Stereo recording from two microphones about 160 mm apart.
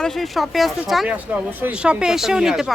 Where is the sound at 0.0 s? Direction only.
Centre (ahead or behind).